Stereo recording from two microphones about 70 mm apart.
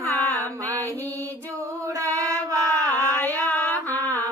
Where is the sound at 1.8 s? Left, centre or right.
Right.